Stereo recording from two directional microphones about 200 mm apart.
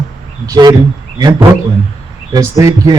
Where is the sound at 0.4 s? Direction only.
20° right (ahead or behind).